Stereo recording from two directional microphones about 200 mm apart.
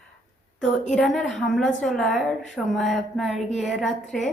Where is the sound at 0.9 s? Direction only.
Centre (ahead or behind).